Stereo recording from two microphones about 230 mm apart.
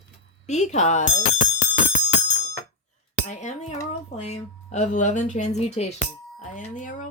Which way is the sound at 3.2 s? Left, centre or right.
Left.